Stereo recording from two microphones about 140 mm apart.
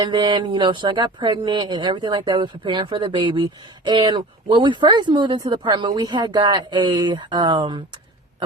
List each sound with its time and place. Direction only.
0.0 s speech: 30° right (ahead or behind)